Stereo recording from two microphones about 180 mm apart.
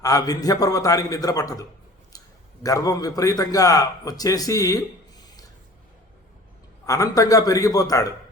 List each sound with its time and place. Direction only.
0.0 s a man's voice: 20° left (ahead or behind)
2.1 s a sound: 20° left (ahead or behind)
2.6 s a man's voice: 20° left (ahead or behind)
6.8 s a man's voice: 20° left (ahead or behind)